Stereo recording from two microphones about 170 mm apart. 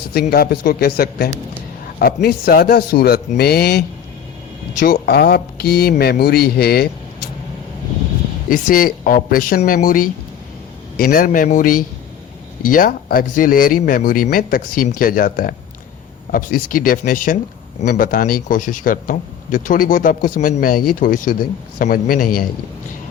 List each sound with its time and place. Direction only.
0.1 s a man's voice: 65° left (ahead or behind)
4.8 s speech: 60° left (ahead or behind)
8.4 s a man's voice: 55° left (ahead or behind)